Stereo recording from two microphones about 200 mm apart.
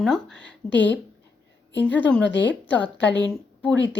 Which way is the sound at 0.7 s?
65° left (ahead or behind).